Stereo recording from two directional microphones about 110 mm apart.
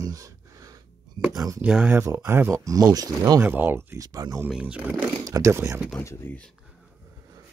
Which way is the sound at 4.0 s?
35° right (ahead or behind).